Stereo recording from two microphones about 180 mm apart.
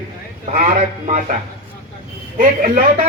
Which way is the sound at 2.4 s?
45° right (ahead or behind).